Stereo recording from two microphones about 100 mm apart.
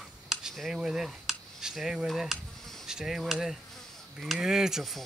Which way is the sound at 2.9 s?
5° right (ahead or behind).